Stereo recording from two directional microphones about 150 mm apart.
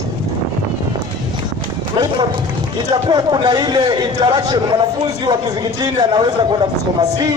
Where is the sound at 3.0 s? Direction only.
30° right (ahead or behind).